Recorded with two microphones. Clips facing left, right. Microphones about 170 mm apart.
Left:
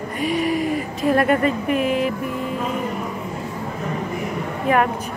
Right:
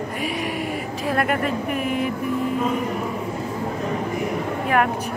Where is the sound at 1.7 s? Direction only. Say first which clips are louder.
Left 5 dB; 90° left.